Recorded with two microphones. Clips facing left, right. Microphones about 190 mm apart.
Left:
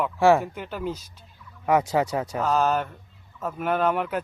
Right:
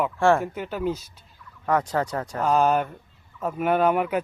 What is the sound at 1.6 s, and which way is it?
Speech, 10° left (ahead or behind).